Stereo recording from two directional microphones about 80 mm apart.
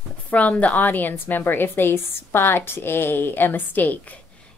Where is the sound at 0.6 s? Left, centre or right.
Centre.